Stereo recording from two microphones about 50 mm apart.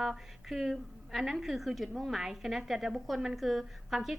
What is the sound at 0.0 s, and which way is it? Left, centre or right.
A woman's voice, centre.